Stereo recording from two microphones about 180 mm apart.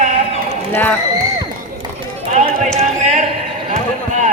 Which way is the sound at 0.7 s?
10° left (ahead or behind).